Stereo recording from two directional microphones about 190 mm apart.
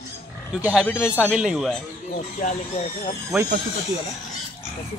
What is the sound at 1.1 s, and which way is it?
Speech, 5° right (ahead or behind).